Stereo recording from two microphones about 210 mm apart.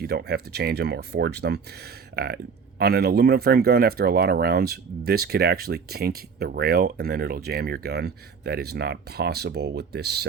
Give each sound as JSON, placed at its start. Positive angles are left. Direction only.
{"t": 0.0, "sound": "speech", "side_deg": -50}